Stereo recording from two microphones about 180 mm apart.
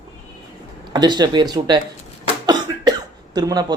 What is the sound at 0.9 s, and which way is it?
Speech, 25° right (ahead or behind).